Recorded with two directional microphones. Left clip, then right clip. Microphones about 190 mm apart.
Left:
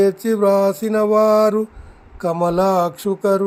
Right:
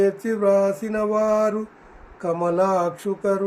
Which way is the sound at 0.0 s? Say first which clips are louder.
Left 4 dB; 50° left (ahead or behind).